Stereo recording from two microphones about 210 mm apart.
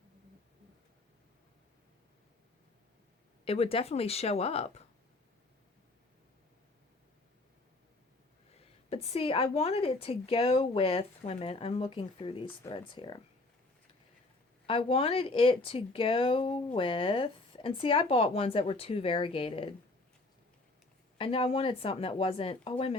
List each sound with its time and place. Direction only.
3.4 s speech: 25° left (ahead or behind)
8.4 s speech: 30° left (ahead or behind)
14.7 s speech: 25° left (ahead or behind)
21.2 s speech: 25° left (ahead or behind)